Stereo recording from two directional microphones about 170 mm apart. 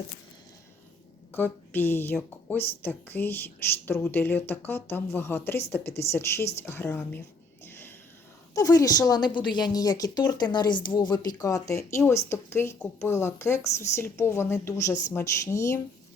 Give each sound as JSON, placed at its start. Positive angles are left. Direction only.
{"t": 1.3, "sound": "speech", "side_deg": 10}
{"t": 7.6, "sound": "a sound", "side_deg": 15}
{"t": 8.5, "sound": "a woman's voice", "side_deg": 20}